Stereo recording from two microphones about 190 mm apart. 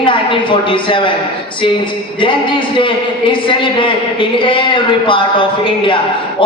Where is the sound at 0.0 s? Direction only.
25° left (ahead or behind).